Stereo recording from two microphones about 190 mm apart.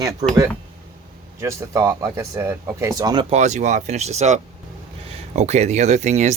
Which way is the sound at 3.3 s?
35° right (ahead or behind).